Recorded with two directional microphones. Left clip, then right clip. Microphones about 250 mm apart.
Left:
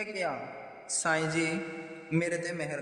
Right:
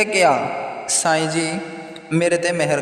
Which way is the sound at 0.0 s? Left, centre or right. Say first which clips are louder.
Right 18 dB; right.